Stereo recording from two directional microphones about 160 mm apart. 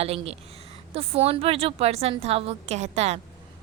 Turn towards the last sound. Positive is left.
turn(degrees=-45)  # may be behind; listen again after turning